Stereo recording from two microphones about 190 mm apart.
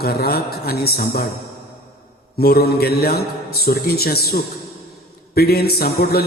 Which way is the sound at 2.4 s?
55° left (ahead or behind).